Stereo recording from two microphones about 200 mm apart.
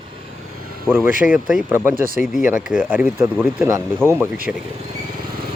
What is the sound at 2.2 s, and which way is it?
Speech, 5° right (ahead or behind).